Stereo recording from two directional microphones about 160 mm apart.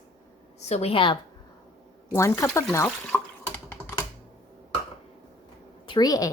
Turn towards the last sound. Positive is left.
turn(degrees=25)  # may be behind; listen again after turning